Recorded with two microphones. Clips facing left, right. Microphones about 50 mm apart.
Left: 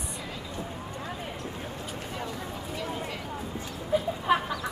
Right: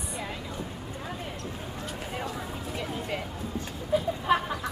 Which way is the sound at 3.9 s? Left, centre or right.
Centre.